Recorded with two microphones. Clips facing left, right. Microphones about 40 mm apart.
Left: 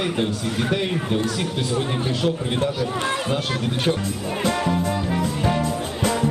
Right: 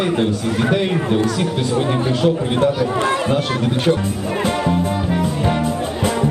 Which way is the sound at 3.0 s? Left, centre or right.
Right.